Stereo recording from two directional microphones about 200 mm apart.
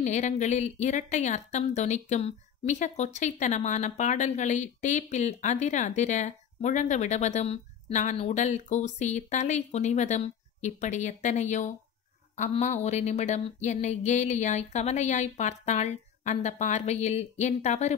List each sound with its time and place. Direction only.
0.0 s speech: 35° left (ahead or behind)